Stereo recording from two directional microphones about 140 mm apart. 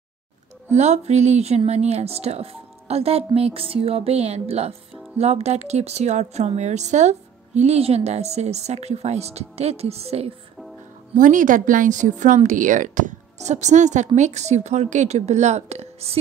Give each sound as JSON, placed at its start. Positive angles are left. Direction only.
{"t": 0.7, "sound": "speech", "side_deg": -55}
{"t": 11.1, "sound": "speech", "side_deg": -70}